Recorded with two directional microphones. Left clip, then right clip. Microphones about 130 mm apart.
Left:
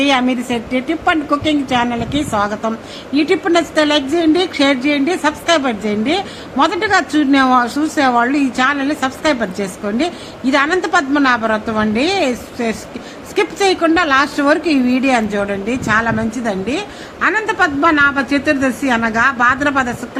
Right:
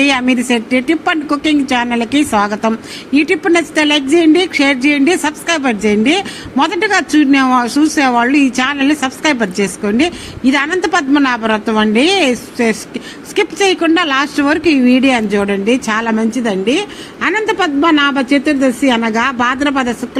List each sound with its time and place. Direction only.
0.0 s a woman's voice: 25° right (ahead or behind)